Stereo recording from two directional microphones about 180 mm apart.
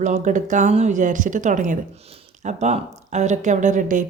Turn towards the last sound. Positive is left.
turn(degrees=-45)  # may be behind; listen again after turning